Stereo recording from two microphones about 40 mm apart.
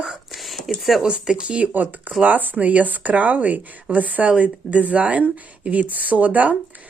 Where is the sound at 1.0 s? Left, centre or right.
Right.